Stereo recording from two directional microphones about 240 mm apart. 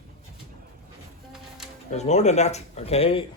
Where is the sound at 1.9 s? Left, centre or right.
Left.